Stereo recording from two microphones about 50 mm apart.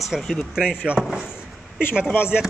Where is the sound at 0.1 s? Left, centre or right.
Centre.